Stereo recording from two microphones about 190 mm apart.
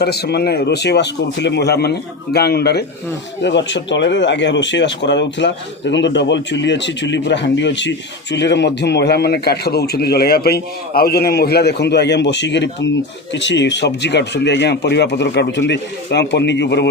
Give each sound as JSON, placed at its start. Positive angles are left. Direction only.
{"t": 0.0, "sound": "speech", "side_deg": 60}
{"t": 3.4, "sound": "speech", "side_deg": 70}